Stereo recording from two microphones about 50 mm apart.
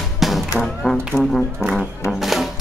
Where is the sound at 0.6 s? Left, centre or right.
Centre.